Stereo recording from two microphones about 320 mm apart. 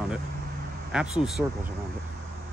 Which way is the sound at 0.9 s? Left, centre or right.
Centre.